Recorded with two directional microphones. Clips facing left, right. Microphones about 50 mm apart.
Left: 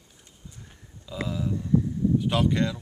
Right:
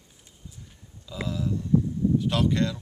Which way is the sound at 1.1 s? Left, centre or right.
Centre.